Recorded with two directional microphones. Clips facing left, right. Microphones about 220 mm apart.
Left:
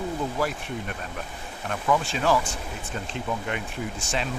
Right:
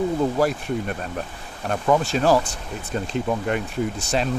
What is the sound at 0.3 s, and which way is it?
Speech, 40° right (ahead or behind).